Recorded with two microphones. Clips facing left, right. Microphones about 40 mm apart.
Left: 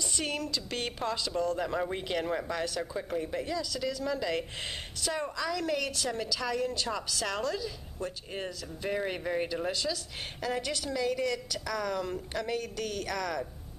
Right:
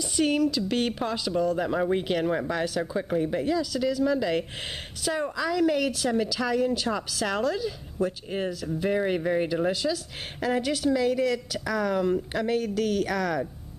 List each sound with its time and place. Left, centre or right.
0.1 s a woman's voice: centre
3.1 s a woman's voice: right
3.3 s a woman's voice: centre